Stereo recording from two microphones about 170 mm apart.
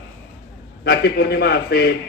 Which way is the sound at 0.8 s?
65° left (ahead or behind).